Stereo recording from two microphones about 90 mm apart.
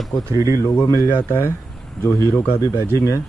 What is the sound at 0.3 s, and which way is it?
Speech, 40° right (ahead or behind).